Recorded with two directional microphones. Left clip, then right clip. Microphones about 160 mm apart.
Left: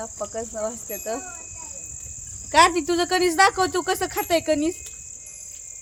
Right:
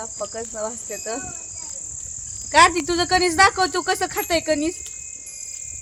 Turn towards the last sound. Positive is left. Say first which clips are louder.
# even
turn(degrees=-40)  # may be behind; listen again after turning